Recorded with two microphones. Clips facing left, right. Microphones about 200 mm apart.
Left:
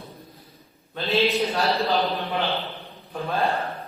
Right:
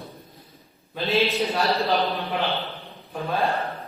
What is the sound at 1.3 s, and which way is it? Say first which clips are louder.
A man's voice: even; centre (ahead or behind).